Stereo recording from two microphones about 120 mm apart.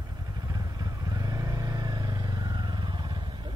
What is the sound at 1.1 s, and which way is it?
Vehicle, 30° right (ahead or behind).